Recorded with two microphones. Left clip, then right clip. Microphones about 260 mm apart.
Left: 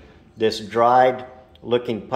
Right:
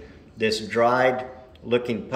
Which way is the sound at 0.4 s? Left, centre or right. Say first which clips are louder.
Left 3 dB; centre.